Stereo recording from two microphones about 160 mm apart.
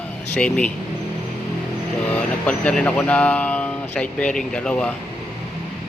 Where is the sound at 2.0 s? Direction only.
10° left (ahead or behind).